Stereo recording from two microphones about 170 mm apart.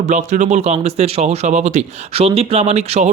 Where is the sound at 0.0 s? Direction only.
45° right (ahead or behind).